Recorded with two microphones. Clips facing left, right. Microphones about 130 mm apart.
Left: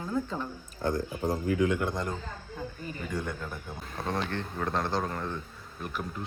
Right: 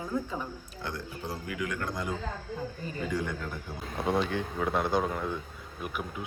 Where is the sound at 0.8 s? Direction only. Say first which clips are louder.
Left 8 dB; 45° left (ahead or behind).